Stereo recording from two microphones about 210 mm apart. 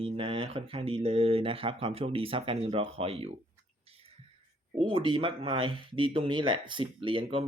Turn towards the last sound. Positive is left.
turn(degrees=-25)  # may be behind; listen again after turning